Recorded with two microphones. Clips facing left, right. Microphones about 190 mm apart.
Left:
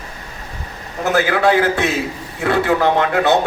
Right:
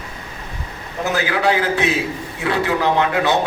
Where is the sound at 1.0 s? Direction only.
50° left (ahead or behind).